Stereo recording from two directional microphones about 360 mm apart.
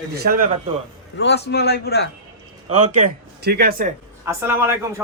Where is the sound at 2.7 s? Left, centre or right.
Right.